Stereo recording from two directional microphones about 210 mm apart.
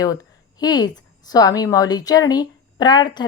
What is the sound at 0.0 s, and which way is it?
Speech, 15° left (ahead or behind).